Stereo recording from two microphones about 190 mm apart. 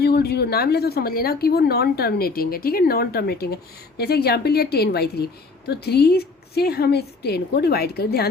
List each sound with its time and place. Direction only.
0.0 s speech: 55° left (ahead or behind)